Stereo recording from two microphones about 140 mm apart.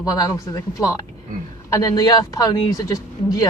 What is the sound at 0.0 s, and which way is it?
A woman's voice, 25° left (ahead or behind).